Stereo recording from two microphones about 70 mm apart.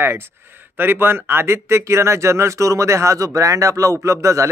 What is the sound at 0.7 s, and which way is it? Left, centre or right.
Speech, right.